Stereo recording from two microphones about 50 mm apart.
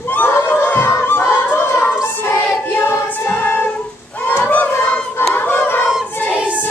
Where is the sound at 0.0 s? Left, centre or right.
Left.